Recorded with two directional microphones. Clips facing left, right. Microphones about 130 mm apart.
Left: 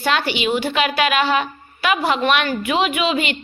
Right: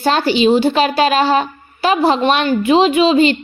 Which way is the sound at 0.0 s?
35° right (ahead or behind).